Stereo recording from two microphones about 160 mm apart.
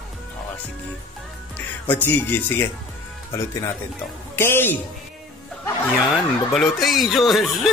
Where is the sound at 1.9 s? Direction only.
10° left (ahead or behind).